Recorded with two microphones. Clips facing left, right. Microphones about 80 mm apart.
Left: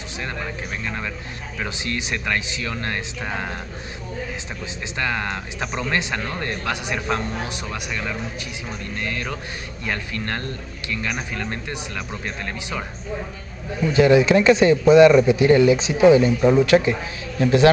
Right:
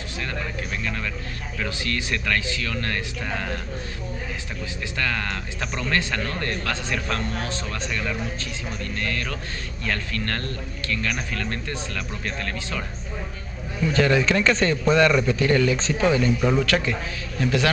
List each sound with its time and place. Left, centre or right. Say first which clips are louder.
0.8 s a man's voice: left 1 dB; left
4.9 s a man's voice: left 3 dB; left
13.8 s a man's voice: left 5 dB; centre